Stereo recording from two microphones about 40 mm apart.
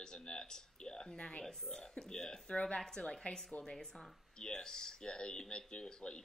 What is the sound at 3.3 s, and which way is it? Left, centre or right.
Speech, left.